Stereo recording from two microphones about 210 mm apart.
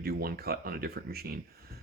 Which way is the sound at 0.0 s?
45° right (ahead or behind).